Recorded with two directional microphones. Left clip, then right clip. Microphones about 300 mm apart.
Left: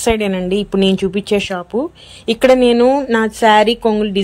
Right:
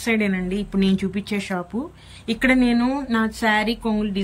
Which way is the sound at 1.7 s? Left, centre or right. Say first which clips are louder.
Left 12 dB; left.